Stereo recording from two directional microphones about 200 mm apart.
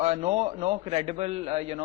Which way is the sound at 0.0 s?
30° right (ahead or behind).